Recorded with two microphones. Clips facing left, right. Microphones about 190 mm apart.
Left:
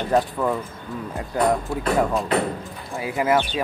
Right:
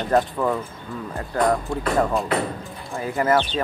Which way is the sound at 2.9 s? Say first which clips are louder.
Even; 10° left (ahead or behind).